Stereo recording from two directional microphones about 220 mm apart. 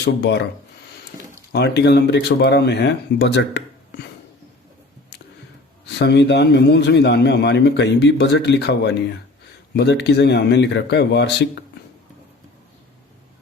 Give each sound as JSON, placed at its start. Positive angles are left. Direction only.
{"t": 0.0, "sound": "a man's voice", "side_deg": 50}
{"t": 1.5, "sound": "a man's voice", "side_deg": 50}
{"t": 6.0, "sound": "a man's voice", "side_deg": 50}